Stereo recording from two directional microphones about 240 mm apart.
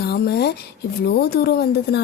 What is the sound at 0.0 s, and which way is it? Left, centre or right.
A woman's voice, left.